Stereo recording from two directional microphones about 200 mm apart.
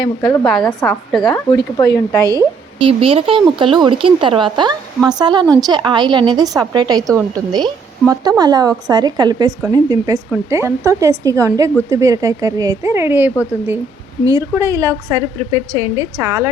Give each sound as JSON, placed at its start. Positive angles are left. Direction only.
{"t": 0.0, "sound": "speech", "side_deg": 25}
{"t": 0.4, "sound": "a woman's voice", "side_deg": 0}
{"t": 1.3, "sound": "speech", "side_deg": 20}
{"t": 2.2, "sound": "a woman's voice", "side_deg": -20}